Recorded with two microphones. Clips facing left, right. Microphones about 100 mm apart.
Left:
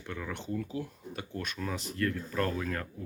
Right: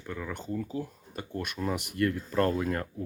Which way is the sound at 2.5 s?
25° right (ahead or behind).